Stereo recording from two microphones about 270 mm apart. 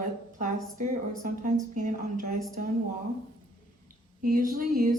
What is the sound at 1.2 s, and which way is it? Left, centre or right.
Speech, right.